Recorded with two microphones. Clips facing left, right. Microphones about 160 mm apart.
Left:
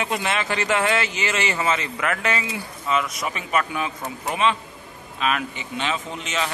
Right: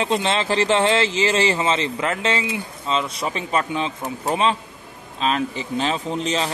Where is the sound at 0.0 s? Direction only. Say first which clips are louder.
Right 4 dB; 25° right (ahead or behind).